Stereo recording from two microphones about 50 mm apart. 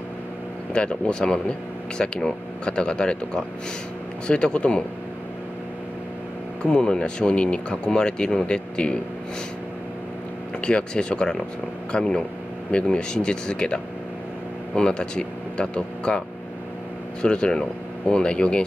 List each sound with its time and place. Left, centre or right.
0.7 s speech: centre
6.6 s speech: centre
10.6 s speech: centre
14.8 s speech: centre
17.2 s speech: centre